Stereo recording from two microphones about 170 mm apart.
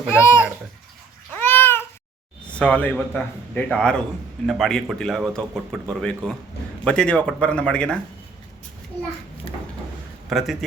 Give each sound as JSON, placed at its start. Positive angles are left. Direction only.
{"t": 0.1, "sound": "a man's voice", "side_deg": 15}
{"t": 1.4, "sound": "cat", "side_deg": 10}
{"t": 2.5, "sound": "a man's voice", "side_deg": 5}
{"t": 10.2, "sound": "a man's voice", "side_deg": 0}